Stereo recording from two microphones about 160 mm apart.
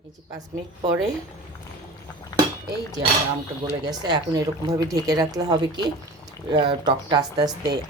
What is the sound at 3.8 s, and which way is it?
Speech, 25° right (ahead or behind).